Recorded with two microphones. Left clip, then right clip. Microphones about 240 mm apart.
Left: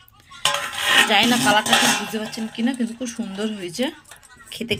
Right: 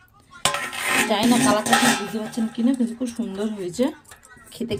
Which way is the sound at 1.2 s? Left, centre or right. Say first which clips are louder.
Left 3 dB; left.